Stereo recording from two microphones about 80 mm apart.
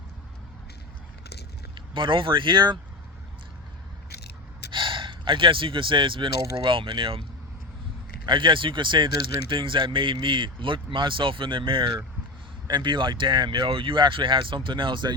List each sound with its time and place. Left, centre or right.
1.9 s speech: right
4.7 s speech: right
8.3 s speech: right
12.6 s speech: right